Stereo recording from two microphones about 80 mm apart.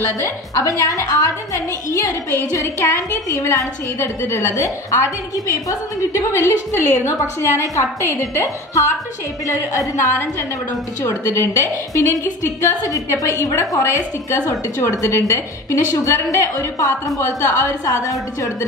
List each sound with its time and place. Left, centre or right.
0.2 s a woman's voice: left
5.3 s a woman's voice: left
12.4 s a woman's voice: left